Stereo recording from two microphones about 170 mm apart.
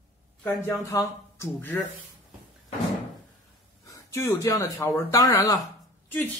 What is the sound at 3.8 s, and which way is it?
Speech, 15° left (ahead or behind).